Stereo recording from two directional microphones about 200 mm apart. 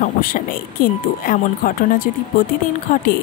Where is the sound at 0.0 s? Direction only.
45° left (ahead or behind).